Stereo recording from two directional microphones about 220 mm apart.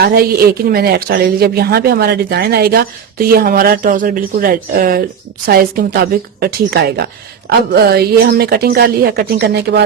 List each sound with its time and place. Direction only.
0.0 s speech: 45° right (ahead or behind)